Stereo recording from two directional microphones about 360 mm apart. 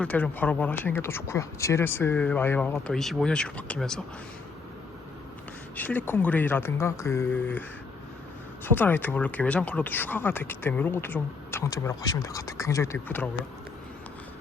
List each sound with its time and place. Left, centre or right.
0.0 s speech: centre
5.7 s speech: centre
8.6 s speech: centre